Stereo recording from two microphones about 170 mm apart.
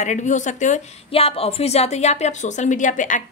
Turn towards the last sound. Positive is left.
turn(degrees=50)  # may be behind; listen again after turning